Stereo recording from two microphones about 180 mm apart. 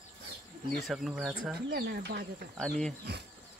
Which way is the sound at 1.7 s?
60° right (ahead or behind).